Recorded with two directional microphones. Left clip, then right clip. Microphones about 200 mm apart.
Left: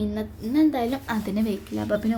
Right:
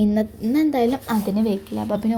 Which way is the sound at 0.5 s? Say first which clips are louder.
Right 3 dB; 20° right (ahead or behind).